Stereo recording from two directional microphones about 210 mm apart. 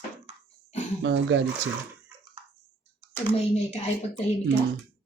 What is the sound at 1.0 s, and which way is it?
Speech, 60° right (ahead or behind).